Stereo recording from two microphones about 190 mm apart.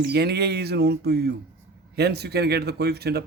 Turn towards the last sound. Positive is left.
turn(degrees=-55)  # may be behind; listen again after turning